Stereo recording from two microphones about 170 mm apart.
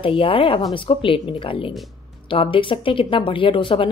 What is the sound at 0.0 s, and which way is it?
A woman's voice, 30° left (ahead or behind).